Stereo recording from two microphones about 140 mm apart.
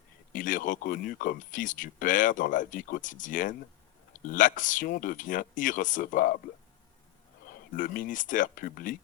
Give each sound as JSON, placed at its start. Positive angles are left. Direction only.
{"t": 0.3, "sound": "speech", "side_deg": 70}
{"t": 7.7, "sound": "speech", "side_deg": 75}